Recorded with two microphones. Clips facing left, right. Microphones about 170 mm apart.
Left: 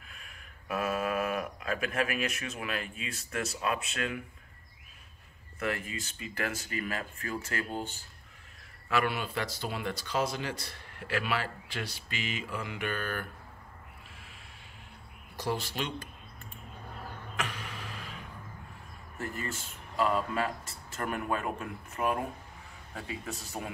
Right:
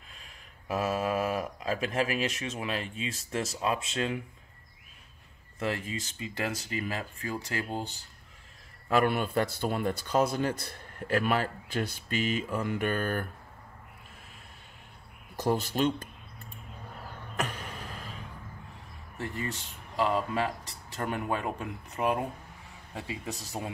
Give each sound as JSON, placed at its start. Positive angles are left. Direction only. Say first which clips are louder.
{"t": 0.7, "sound": "speech", "louder": "right 2 dB", "side_deg": -25}
{"t": 5.6, "sound": "speech", "louder": "right 2 dB", "side_deg": -25}
{"t": 8.8, "sound": "speech", "louder": "right 4 dB", "side_deg": -45}
{"t": 15.4, "sound": "speech", "louder": "right 7 dB", "side_deg": -45}
{"t": 17.4, "sound": "a sound", "louder": "right 3 dB", "side_deg": -40}
{"t": 19.2, "sound": "speech", "louder": "right 2 dB", "side_deg": -20}